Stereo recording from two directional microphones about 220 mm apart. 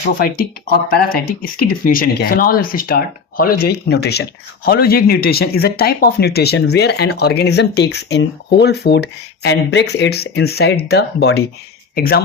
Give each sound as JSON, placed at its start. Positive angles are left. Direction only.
{"t": 0.2, "sound": "speech", "side_deg": 45}